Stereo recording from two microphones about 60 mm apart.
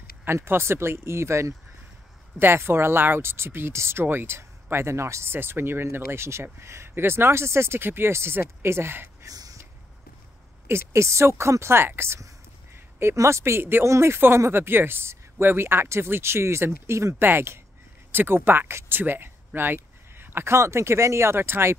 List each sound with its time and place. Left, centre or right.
0.2 s speech: right
9.2 s a sound: right
10.7 s speech: right
13.8 s speech: right
17.1 s speech: right